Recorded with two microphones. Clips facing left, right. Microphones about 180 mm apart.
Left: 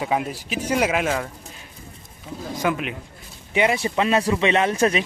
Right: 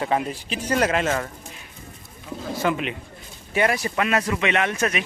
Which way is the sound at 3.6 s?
20° left (ahead or behind).